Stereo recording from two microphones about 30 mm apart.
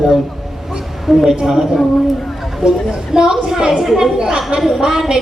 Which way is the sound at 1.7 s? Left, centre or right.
Centre.